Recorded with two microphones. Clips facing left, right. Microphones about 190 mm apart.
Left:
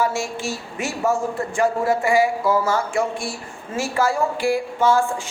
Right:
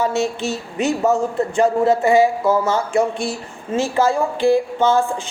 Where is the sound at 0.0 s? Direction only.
20° right (ahead or behind).